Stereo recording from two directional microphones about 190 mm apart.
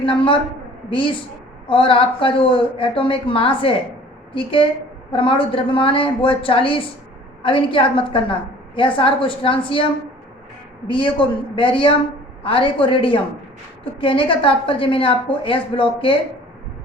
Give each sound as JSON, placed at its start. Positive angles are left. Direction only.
{"t": 0.0, "sound": "a woman's voice", "side_deg": 25}
{"t": 10.8, "sound": "a woman's voice", "side_deg": 25}